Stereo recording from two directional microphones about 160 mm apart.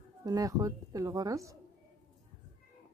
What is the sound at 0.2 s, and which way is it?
A woman's voice, 20° right (ahead or behind).